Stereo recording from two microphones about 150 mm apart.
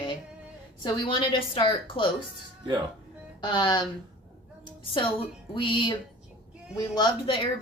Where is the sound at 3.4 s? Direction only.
30° left (ahead or behind).